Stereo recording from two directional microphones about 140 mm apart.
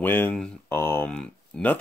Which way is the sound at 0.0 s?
15° left (ahead or behind).